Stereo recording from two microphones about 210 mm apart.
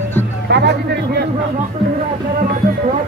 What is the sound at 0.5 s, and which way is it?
Speech, 55° right (ahead or behind).